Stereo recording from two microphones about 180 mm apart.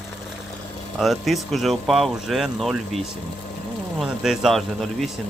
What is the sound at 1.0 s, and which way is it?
Speech, centre (ahead or behind).